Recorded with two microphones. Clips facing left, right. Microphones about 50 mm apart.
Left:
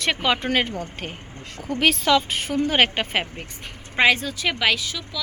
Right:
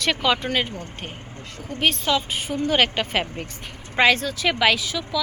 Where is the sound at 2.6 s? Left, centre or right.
Left.